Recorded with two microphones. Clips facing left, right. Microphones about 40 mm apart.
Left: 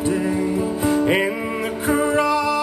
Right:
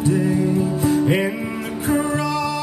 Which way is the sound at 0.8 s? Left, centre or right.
Left.